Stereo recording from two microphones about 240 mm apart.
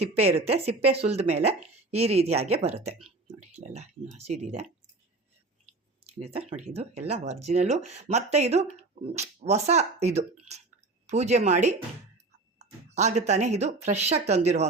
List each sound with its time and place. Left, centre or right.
0.0 s speech: right
4.2 s speech: right
6.1 s speech: right